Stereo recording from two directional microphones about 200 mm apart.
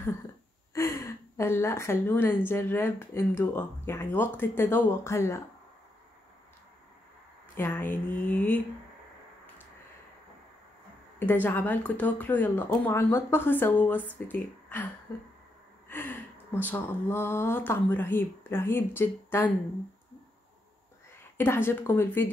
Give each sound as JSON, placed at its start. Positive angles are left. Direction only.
{"t": 0.7, "sound": "a woman's voice", "side_deg": 15}
{"t": 7.5, "sound": "a woman's voice", "side_deg": 10}
{"t": 11.1, "sound": "a woman's voice", "side_deg": 10}
{"t": 15.9, "sound": "a woman's voice", "side_deg": 10}
{"t": 21.4, "sound": "a woman's voice", "side_deg": 10}